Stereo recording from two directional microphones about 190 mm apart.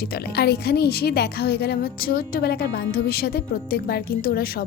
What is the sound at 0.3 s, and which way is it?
A woman's voice, 60° left (ahead or behind).